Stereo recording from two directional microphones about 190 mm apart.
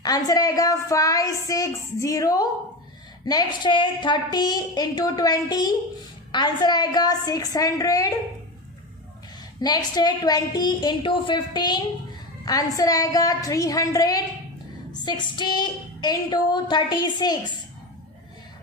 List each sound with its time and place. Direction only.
0.0 s a woman's voice: 20° left (ahead or behind)
3.2 s child singing: 20° left (ahead or behind)
9.6 s child singing: 20° left (ahead or behind)